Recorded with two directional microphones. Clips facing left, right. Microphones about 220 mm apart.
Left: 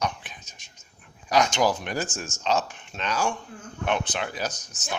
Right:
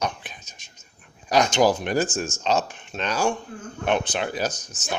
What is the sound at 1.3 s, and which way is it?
Speech, 35° right (ahead or behind).